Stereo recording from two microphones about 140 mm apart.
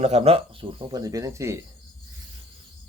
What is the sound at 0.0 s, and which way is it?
Speech, 45° right (ahead or behind).